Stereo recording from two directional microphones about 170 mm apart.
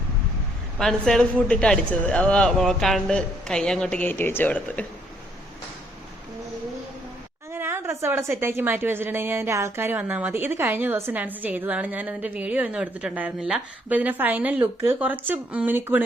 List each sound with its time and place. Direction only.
0.8 s a man's voice: centre (ahead or behind)
7.5 s a woman's voice: 15° right (ahead or behind)